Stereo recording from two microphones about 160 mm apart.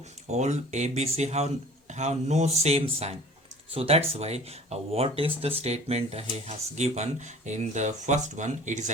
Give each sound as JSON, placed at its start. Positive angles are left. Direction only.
{"t": 0.3, "sound": "speech", "side_deg": -45}